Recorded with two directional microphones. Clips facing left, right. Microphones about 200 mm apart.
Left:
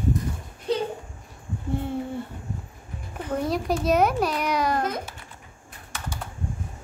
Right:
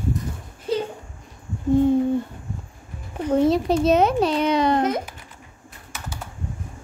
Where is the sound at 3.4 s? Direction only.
25° right (ahead or behind).